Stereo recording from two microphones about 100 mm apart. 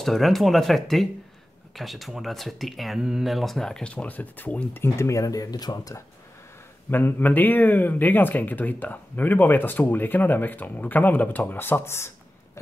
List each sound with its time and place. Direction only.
0.0 s speech: centre (ahead or behind); by 6.0 s 40° left (ahead or behind)
6.9 s speech: 20° left (ahead or behind)